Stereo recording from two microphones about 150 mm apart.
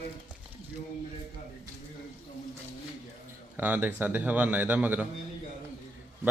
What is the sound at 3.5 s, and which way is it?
Speech, 10° right (ahead or behind).